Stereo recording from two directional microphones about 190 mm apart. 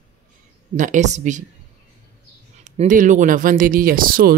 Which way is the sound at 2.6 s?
40° right (ahead or behind).